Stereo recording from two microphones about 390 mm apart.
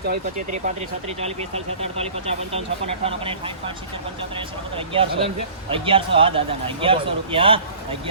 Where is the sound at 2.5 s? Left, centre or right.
Centre.